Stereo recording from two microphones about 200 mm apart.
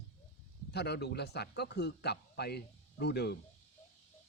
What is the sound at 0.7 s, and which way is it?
Speech, 55° left (ahead or behind).